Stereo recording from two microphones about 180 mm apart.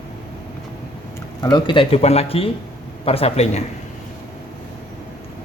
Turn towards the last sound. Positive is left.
turn(degrees=40)  # may be behind; listen again after turning